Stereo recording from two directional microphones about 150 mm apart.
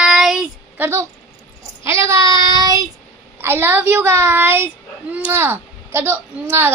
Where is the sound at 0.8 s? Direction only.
15° right (ahead or behind).